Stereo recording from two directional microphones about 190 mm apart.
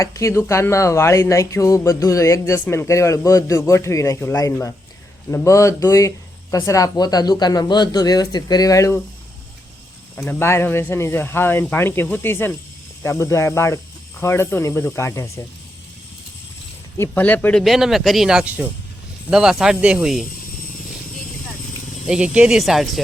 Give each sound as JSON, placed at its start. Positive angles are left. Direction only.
{"t": 0.0, "sound": "speech", "side_deg": 15}
{"t": 10.2, "sound": "speech", "side_deg": 10}
{"t": 17.0, "sound": "speech", "side_deg": 10}
{"t": 22.0, "sound": "speech", "side_deg": -5}